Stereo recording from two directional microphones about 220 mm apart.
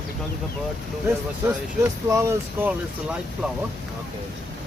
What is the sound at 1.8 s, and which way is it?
Speech, 15° right (ahead or behind).